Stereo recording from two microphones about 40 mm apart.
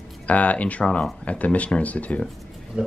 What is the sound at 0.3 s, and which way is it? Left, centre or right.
Speech, left.